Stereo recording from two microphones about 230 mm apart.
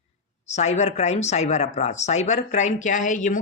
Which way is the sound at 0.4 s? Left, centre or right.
Left.